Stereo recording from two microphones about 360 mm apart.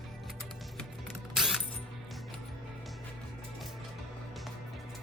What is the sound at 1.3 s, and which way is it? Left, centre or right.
Music, centre.